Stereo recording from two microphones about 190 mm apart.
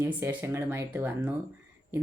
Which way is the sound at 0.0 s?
10° right (ahead or behind).